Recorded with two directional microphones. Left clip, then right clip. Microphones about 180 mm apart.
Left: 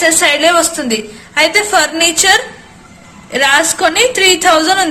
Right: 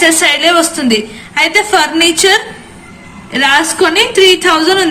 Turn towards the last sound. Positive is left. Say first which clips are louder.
# even
turn(degrees=55)  # may be behind; listen again after turning